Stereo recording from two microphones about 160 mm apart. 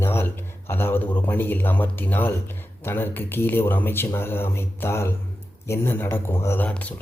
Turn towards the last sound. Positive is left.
turn(degrees=10)  # may be behind; listen again after turning